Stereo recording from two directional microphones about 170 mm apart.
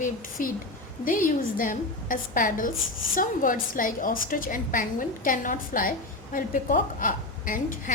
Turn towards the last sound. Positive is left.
turn(degrees=50)  # may be behind; listen again after turning